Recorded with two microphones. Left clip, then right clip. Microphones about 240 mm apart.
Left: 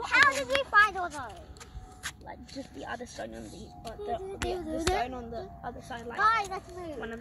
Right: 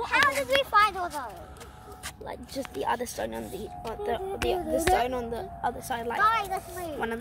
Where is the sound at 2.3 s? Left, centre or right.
Right.